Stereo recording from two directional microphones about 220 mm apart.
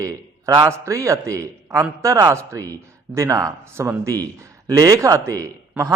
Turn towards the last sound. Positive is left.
turn(degrees=-15)  # may be behind; listen again after turning